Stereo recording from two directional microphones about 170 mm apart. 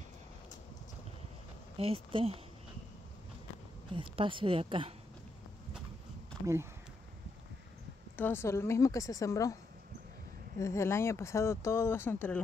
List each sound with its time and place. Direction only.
1.8 s a woman's voice: 35° right (ahead or behind)
3.9 s a woman's voice: 30° right (ahead or behind)
6.4 s speech: 15° right (ahead or behind)
8.2 s speech: 15° left (ahead or behind)
10.6 s speech: 15° left (ahead or behind)